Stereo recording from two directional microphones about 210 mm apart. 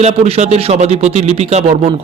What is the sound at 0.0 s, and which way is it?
Speech, 30° right (ahead or behind).